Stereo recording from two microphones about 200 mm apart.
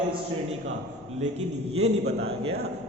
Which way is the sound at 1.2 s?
35° right (ahead or behind).